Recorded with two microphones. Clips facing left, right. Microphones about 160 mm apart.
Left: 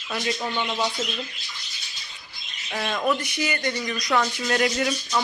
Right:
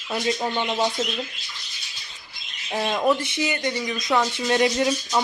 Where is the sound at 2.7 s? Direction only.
20° right (ahead or behind).